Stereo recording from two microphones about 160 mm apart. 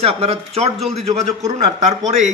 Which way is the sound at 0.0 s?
40° right (ahead or behind).